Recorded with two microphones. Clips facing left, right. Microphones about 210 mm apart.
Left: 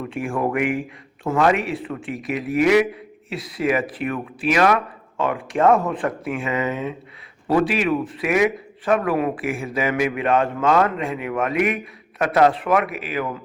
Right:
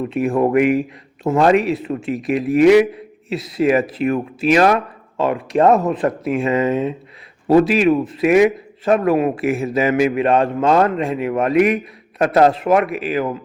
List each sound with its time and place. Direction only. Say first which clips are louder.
0.1 s a man's voice: right 7 dB; 25° right (ahead or behind)